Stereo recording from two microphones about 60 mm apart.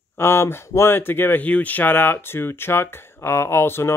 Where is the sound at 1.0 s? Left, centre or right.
Left.